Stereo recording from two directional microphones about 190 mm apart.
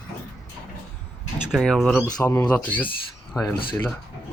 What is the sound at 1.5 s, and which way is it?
Speech, centre (ahead or behind).